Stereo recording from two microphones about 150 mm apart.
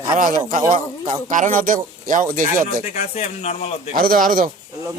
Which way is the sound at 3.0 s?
45° left (ahead or behind).